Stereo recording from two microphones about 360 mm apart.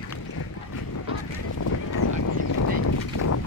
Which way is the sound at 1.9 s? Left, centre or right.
Left.